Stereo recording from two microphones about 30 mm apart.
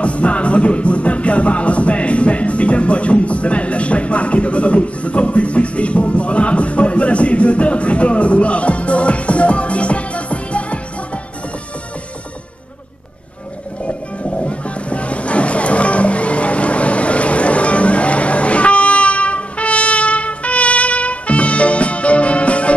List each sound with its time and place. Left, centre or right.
0.0 s music: left
13.8 s music: left